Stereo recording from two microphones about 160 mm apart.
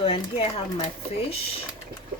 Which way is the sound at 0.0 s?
35° left (ahead or behind).